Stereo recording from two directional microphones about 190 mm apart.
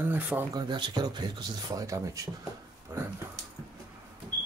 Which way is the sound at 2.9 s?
10° right (ahead or behind).